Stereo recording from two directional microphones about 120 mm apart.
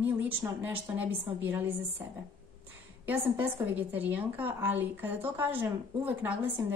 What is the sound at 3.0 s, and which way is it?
A woman's voice, 15° right (ahead or behind).